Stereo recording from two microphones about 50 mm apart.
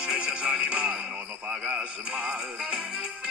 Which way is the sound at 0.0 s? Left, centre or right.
Centre.